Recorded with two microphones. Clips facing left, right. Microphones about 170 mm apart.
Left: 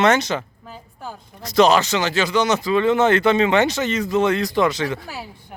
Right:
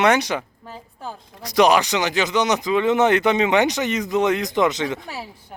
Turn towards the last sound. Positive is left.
turn(degrees=-20)  # may be behind; listen again after turning